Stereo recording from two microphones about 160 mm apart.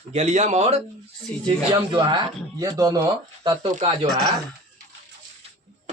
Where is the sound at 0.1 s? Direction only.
45° right (ahead or behind).